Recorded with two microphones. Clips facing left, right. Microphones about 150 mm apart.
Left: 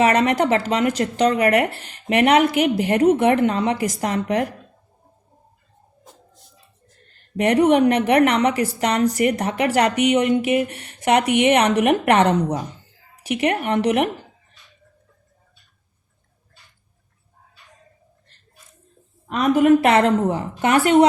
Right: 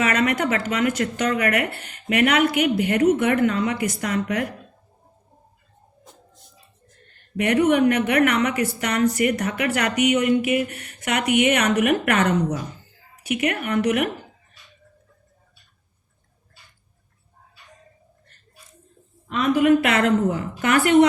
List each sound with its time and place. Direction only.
0.0 s a woman's voice: 30° left (ahead or behind)
7.3 s a woman's voice: 35° left (ahead or behind)
19.3 s a woman's voice: 40° left (ahead or behind)